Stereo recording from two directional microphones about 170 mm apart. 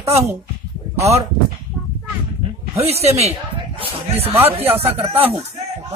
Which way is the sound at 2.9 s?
35° right (ahead or behind).